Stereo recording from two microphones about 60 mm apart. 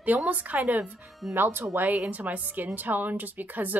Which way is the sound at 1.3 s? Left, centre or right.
Right.